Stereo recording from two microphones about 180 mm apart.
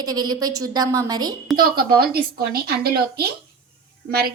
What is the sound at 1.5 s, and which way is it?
A woman's voice, 60° right (ahead or behind).